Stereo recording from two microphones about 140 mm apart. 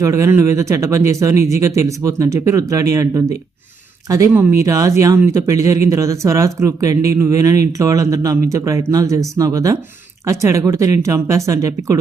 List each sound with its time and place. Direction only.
0.0 s speech: 20° right (ahead or behind)